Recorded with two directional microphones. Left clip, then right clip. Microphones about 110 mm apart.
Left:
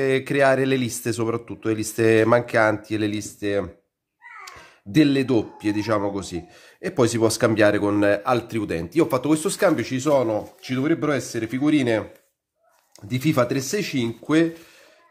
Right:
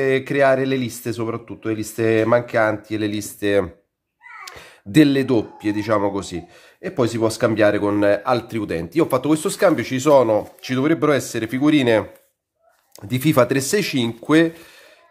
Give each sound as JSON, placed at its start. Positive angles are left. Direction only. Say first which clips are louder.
{"t": 0.0, "sound": "speech", "louder": "right 2 dB", "side_deg": -10}
{"t": 3.2, "sound": "speech", "louder": "right 6 dB", "side_deg": -20}
{"t": 4.5, "sound": "cat", "louder": "right 4 dB", "side_deg": -35}
{"t": 5.0, "sound": "speech", "louder": "even", "side_deg": -15}
{"t": 6.0, "sound": "speech", "louder": "right 4 dB", "side_deg": -20}
{"t": 6.8, "sound": "speech", "louder": "even", "side_deg": 10}
{"t": 9.9, "sound": "speech", "louder": "right 6 dB", "side_deg": -30}
{"t": 13.1, "sound": "speech", "louder": "right 5 dB", "side_deg": -30}